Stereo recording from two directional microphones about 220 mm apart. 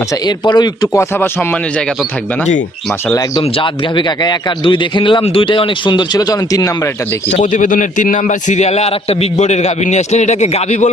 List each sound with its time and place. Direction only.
0.5 s speech: 15° left (ahead or behind)
3.1 s a man's voice: 20° left (ahead or behind)
7.3 s a man's voice: 35° left (ahead or behind)